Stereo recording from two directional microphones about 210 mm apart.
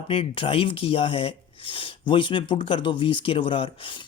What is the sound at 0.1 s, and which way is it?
Speech, 25° left (ahead or behind).